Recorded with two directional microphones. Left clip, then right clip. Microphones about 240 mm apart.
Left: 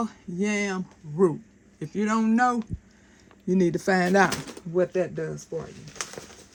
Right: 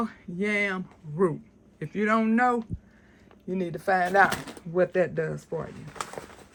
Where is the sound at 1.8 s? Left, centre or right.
Centre; by 4.3 s left.